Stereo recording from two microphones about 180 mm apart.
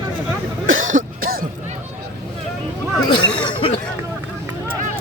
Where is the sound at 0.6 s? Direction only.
90° right.